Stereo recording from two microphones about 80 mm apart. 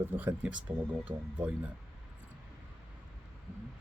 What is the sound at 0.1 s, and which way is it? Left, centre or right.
Speech, right.